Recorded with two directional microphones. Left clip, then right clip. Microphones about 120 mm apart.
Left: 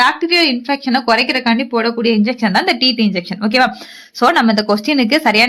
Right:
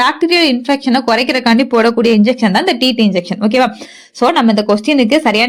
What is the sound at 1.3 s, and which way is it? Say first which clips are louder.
Speech: right 4 dB; 80° right.